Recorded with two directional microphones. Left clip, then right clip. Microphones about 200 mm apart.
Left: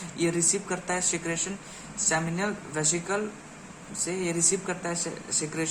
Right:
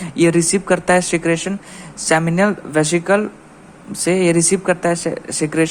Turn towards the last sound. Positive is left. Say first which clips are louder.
# right 13 dB
turn(degrees=-40)  # may be behind; listen again after turning